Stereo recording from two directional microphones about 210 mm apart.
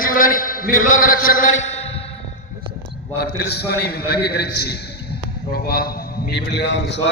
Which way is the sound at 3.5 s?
50° left (ahead or behind).